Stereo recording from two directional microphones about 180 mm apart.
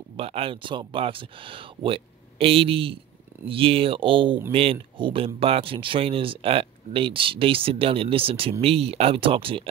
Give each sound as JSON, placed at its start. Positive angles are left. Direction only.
{"t": 0.2, "sound": "speech", "side_deg": -30}